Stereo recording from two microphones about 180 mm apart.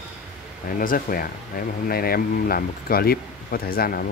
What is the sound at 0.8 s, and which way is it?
Speech, 50° left (ahead or behind).